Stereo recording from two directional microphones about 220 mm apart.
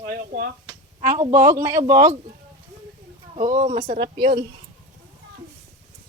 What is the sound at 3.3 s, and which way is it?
A woman's voice, 35° right (ahead or behind).